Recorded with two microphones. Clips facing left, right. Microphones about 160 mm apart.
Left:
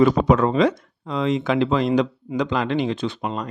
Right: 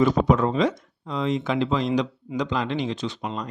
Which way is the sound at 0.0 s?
80° left.